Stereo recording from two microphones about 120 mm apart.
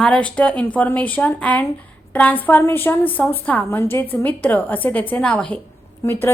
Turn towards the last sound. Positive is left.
turn(degrees=20)  # may be behind; listen again after turning